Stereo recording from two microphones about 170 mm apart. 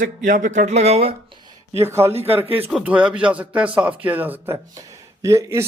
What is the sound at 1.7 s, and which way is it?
Speech, 15° right (ahead or behind).